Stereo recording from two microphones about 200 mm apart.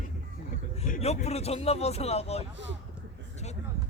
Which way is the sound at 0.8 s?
35° left (ahead or behind).